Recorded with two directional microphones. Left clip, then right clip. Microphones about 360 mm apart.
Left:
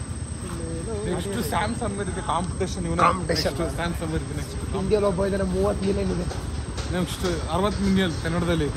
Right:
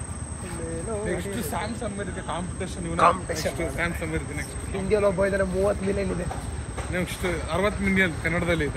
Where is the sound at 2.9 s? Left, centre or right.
Centre.